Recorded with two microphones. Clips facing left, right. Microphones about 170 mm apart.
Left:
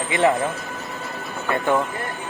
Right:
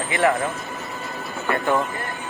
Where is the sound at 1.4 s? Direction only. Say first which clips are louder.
Left 1 dB; 20° left (ahead or behind).